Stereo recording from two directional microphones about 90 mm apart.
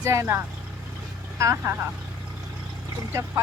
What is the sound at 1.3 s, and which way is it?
Speech, 35° right (ahead or behind).